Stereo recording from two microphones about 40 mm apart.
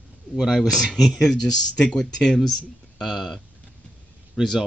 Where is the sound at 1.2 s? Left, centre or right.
Centre.